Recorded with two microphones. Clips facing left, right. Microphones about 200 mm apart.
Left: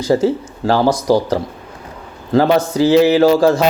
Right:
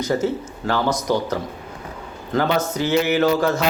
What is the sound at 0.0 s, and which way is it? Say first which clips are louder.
Speech: left 6 dB; 35° left (ahead or behind).